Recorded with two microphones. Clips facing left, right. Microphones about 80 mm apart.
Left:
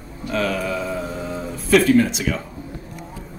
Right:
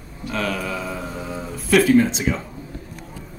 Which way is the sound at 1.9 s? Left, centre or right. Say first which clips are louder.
Right 1 dB; right.